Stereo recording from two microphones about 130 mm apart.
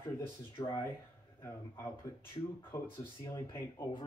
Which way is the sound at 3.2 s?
25° left (ahead or behind).